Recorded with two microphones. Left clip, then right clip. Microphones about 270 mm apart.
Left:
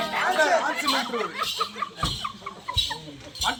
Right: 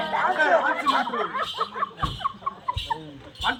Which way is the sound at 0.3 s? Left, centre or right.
Left.